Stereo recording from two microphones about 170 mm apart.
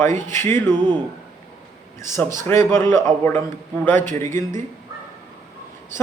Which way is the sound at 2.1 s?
15° left (ahead or behind).